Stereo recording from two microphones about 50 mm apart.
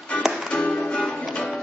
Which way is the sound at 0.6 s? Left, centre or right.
Left.